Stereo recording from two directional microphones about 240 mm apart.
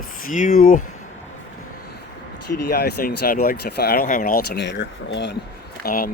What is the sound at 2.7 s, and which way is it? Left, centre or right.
Speech, left.